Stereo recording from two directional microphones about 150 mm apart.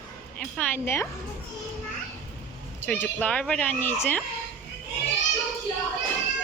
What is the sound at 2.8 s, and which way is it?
Speech, 10° left (ahead or behind).